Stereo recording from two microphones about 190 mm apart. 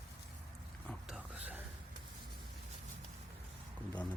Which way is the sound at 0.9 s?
Centre (ahead or behind).